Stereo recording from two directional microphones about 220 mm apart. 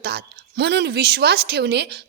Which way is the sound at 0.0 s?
50° right (ahead or behind).